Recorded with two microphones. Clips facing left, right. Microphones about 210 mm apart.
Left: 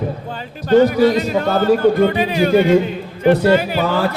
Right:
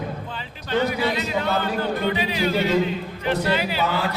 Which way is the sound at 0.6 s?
45° left (ahead or behind).